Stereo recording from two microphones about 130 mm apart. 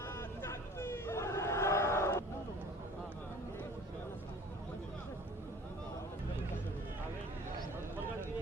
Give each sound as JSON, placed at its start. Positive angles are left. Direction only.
{"t": 0.1, "sound": "crowd", "side_deg": 20}